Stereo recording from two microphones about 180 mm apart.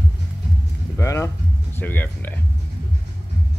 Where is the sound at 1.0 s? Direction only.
15° left (ahead or behind).